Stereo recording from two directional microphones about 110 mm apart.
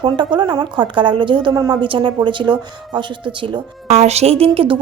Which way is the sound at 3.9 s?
75° right (ahead or behind).